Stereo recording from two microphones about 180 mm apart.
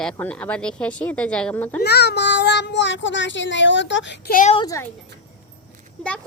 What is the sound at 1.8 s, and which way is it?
Speech, 65° left (ahead or behind).